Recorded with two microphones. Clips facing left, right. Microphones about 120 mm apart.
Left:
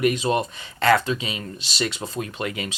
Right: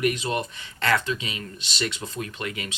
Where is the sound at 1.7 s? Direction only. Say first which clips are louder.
Left 3 dB; 30° left (ahead or behind).